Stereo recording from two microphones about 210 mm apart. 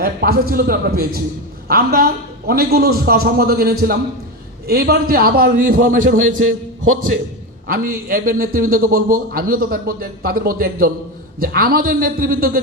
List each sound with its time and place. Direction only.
0.0 s a man's voice: 45° right (ahead or behind)
7.7 s a man's voice: 40° right (ahead or behind)